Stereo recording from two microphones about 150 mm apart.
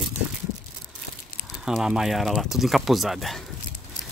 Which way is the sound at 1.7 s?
5° right (ahead or behind).